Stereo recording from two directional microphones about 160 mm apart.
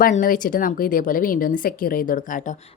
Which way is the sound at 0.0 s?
55° left (ahead or behind).